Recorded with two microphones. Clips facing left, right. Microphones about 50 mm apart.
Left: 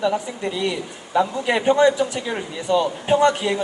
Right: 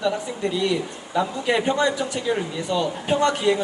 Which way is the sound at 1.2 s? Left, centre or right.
Centre.